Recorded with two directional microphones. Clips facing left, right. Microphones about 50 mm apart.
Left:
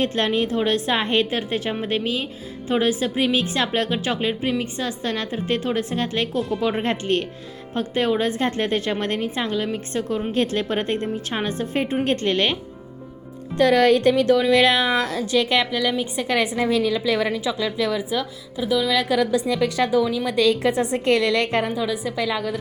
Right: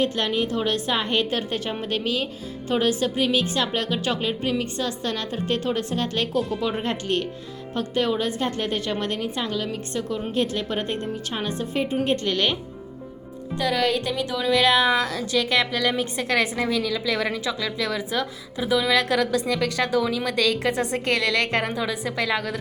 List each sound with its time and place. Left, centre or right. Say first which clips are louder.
0.0 s a woman's voice: left 2 dB; left
1.3 s a woman's voice: left 2 dB; left
6.3 s a woman's voice: left 1 dB; centre
6.8 s a woman's voice: left 3 dB; left
13.6 s speech: left 7 dB; left
14.1 s speech: left 10 dB; left
14.5 s a woman's voice: left 1 dB; left
16.0 s a woman's voice: left 1 dB; centre
16.6 s a woman's voice: left 4 dB; left
21.6 s a woman's voice: left 2 dB; centre